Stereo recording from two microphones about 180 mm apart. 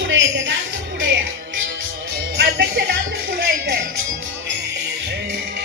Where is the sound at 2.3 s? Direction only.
70° right (ahead or behind).